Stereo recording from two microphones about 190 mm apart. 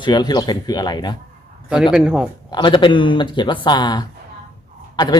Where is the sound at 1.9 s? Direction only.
5° right (ahead or behind).